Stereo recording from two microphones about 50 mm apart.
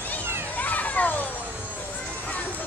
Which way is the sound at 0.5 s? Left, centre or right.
Left.